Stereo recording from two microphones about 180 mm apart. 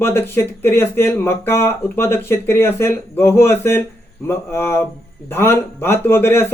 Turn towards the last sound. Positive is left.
turn(degrees=15)  # may be behind; listen again after turning